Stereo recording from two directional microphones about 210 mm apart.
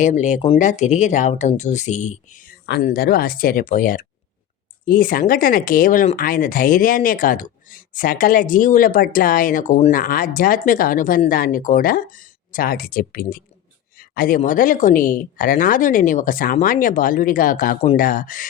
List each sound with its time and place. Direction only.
0.0 s speech: 35° left (ahead or behind)